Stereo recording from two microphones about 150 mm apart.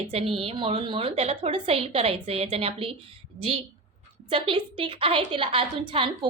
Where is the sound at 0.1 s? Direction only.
40° right (ahead or behind).